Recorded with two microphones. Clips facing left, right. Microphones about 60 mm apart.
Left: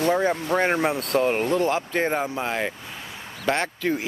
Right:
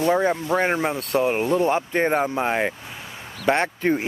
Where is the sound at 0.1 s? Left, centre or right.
Centre.